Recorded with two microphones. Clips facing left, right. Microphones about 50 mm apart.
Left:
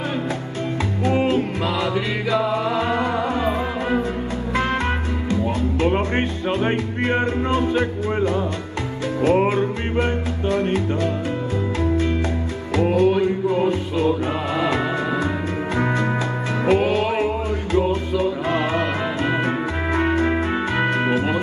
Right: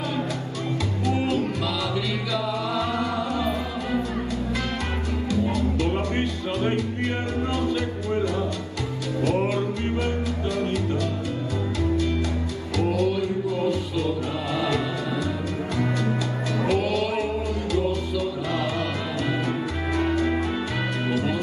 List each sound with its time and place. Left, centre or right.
1.0 s music: left
5.3 s music: left
12.7 s music: left
16.6 s music: left